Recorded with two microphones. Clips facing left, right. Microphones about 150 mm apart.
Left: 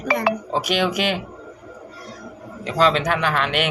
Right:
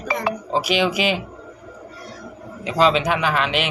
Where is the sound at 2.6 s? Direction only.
10° right (ahead or behind).